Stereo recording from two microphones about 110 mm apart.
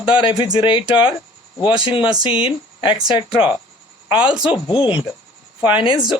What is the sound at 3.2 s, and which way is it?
Speech, 10° right (ahead or behind).